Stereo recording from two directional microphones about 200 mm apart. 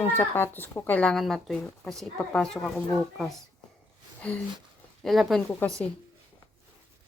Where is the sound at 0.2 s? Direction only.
10° left (ahead or behind).